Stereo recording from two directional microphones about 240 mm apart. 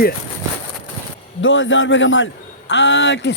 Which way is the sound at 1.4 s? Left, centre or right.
Left.